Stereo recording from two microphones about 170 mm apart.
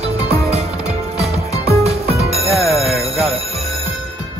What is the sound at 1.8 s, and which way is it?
Music, 35° right (ahead or behind).